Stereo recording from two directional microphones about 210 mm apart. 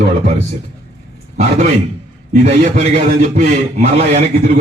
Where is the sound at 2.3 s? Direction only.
35° right (ahead or behind).